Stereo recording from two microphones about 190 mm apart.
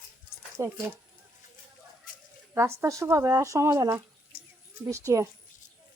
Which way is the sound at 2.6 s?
15° right (ahead or behind).